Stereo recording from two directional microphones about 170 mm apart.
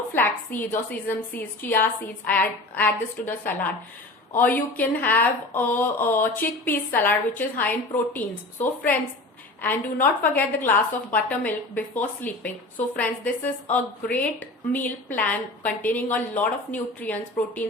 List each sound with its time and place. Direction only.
0.1 s speech: 10° left (ahead or behind)